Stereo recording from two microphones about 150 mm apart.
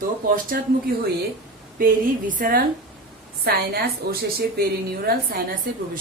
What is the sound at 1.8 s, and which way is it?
Speech, 65° right (ahead or behind).